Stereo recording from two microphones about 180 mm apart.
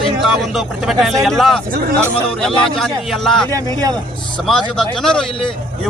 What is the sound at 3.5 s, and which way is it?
Speech, 20° right (ahead or behind).